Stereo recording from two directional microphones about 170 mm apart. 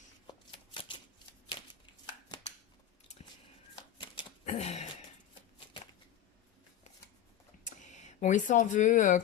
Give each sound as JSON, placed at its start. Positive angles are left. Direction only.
{"t": 0.3, "sound": "shuffling cards", "side_deg": 30}
{"t": 3.9, "sound": "typewriter", "side_deg": 30}
{"t": 4.4, "sound": "a sound", "side_deg": 40}
{"t": 7.6, "sound": "speech", "side_deg": 45}